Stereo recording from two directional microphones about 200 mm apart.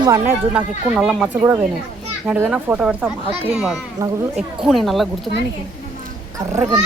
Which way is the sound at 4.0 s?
20° right (ahead or behind).